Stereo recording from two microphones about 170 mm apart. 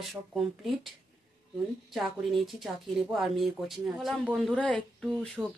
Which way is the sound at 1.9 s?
Centre (ahead or behind).